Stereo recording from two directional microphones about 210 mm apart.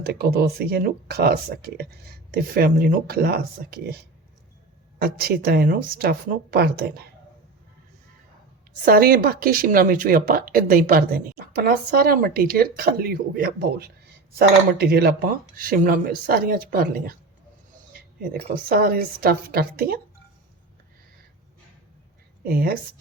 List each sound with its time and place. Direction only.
0.0 s speech: 50° right (ahead or behind)
8.8 s speech: 45° right (ahead or behind)
18.7 s speech: 45° right (ahead or behind)
22.4 s speech: 45° right (ahead or behind)